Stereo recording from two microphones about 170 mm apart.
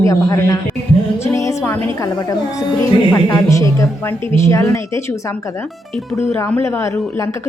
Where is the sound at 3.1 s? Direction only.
20° left (ahead or behind).